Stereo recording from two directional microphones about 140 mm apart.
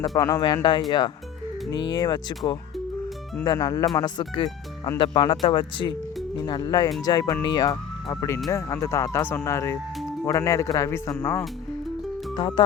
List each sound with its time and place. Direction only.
0.2 s speech: 30° left (ahead or behind)
12.4 s speech: 35° left (ahead or behind)